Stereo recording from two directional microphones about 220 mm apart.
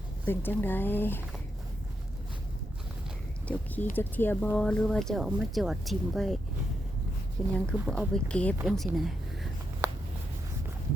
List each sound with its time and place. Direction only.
0.3 s speech: 10° left (ahead or behind)
3.4 s a sound: 5° left (ahead or behind)
3.9 s speech: 10° left (ahead or behind)
7.5 s speech: 5° left (ahead or behind)